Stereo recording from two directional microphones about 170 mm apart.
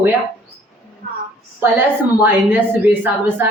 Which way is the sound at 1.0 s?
60° right (ahead or behind).